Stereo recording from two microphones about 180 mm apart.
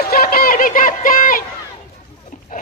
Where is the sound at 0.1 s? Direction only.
55° left (ahead or behind).